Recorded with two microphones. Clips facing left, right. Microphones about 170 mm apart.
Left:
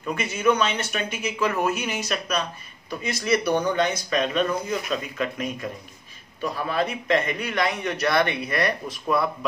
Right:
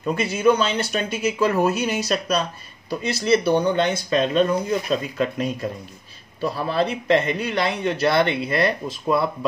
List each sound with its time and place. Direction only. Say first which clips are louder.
0.0 s speech: right 4 dB; 35° right (ahead or behind)